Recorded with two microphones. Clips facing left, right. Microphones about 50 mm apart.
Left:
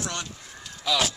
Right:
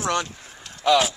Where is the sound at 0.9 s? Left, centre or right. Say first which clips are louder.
Right 7 dB; centre.